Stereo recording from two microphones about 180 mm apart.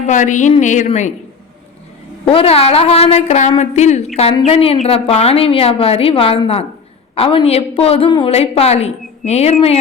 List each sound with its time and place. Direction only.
0.1 s a woman's voice: 45° left (ahead or behind)
2.2 s a woman's voice: 30° left (ahead or behind)